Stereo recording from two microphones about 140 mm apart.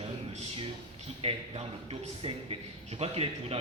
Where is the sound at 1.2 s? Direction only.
45° right (ahead or behind).